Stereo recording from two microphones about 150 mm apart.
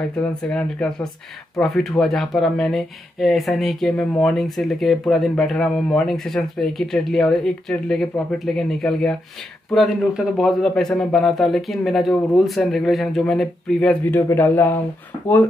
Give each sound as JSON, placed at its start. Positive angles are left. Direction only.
{"t": 0.1, "sound": "speech", "side_deg": 5}